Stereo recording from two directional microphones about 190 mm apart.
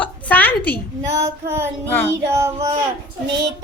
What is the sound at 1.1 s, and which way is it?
Female singing, 15° right (ahead or behind).